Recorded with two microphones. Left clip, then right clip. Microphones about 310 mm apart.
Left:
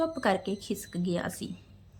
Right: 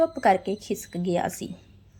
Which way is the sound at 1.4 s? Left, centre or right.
Centre.